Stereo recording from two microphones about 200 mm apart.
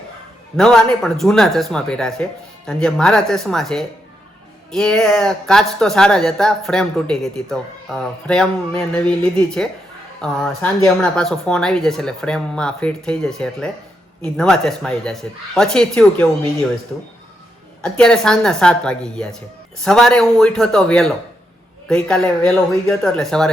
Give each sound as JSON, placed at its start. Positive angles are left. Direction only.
{"t": 0.5, "sound": "speech", "side_deg": 0}
{"t": 17.8, "sound": "speech", "side_deg": 5}